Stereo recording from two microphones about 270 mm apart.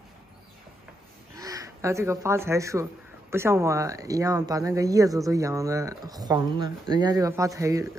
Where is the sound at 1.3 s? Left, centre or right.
Centre.